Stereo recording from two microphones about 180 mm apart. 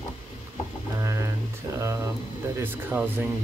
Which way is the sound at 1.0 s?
15° right (ahead or behind).